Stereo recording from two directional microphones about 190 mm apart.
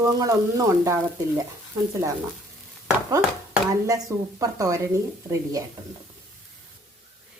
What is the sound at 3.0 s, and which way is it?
Speech, 15° right (ahead or behind).